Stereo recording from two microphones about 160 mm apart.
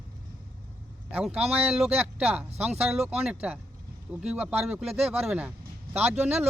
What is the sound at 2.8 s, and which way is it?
Speech, 5° right (ahead or behind).